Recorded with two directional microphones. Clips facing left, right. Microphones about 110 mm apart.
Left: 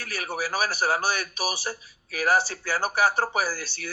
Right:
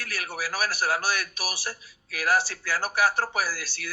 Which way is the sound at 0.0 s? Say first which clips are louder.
Left 3 dB; 25° left (ahead or behind).